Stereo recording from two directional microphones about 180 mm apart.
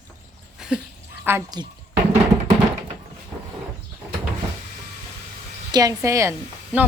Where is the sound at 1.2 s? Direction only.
15° right (ahead or behind).